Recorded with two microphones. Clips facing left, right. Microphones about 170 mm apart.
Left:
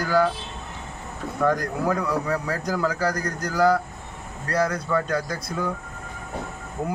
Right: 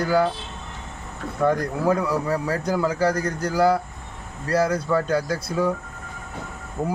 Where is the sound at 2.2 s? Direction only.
25° right (ahead or behind).